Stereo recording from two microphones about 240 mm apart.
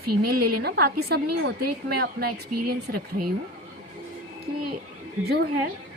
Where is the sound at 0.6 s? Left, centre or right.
Right.